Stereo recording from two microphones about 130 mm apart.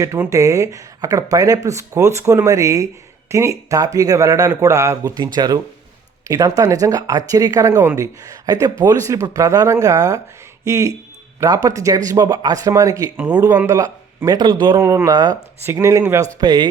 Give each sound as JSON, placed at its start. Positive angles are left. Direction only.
{"t": 0.0, "sound": "speech", "side_deg": -25}
{"t": 14.8, "sound": "speech", "side_deg": -20}